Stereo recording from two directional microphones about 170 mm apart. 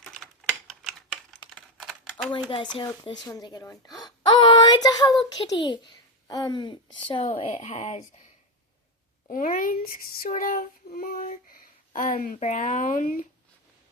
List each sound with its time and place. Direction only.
0.7 s a sound: centre (ahead or behind)
1.5 s typing: centre (ahead or behind)
2.7 s speech: 25° left (ahead or behind); by 8.0 s 45° left (ahead or behind)
9.3 s child singing: 55° left (ahead or behind)